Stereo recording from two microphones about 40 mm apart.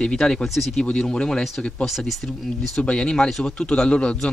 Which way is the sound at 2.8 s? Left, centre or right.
Left.